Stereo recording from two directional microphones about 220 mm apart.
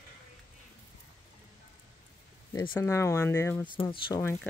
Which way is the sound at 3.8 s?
25° left (ahead or behind).